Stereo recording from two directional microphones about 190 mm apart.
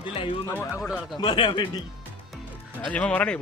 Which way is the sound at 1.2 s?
25° left (ahead or behind).